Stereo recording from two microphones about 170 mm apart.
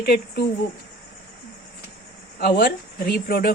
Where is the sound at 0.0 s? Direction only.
60° left (ahead or behind).